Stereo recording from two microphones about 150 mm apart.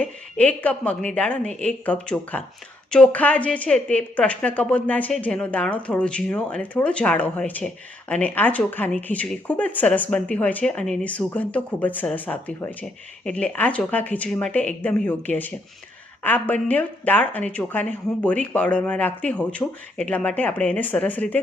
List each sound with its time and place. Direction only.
0.0 s speech: 10° left (ahead or behind)